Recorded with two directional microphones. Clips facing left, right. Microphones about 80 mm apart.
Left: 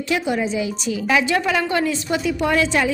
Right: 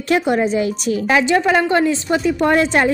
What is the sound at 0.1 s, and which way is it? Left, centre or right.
Speech, right.